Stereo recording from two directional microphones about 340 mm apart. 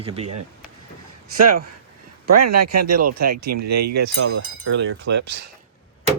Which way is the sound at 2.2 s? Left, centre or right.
Right.